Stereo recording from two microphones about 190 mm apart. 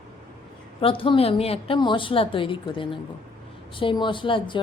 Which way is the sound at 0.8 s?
30° left (ahead or behind).